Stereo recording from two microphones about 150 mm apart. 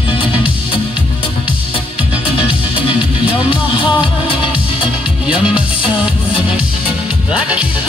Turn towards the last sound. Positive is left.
turn(degrees=-10)  # may be behind; listen again after turning